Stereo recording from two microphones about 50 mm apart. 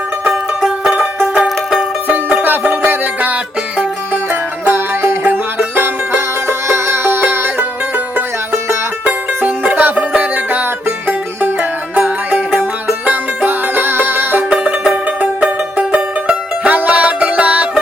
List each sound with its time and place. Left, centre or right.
0.6 s music: centre
2.8 s music: right
9.0 s music: right
9.9 s music: right
10.3 s music: right
11.9 s music: right
14.5 s music: centre
15.2 s music: right